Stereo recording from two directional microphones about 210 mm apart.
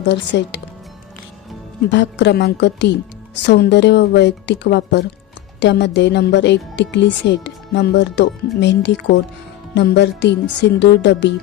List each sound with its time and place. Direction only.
0.0 s a woman's voice: 55° left (ahead or behind)
1.9 s a woman's voice: 55° left (ahead or behind)